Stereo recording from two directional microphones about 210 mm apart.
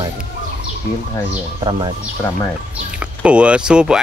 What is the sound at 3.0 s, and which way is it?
Speech, 5° right (ahead or behind).